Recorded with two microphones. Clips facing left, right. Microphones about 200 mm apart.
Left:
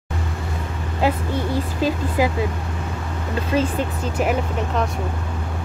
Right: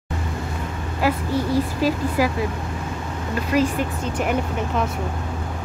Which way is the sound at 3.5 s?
25° left (ahead or behind).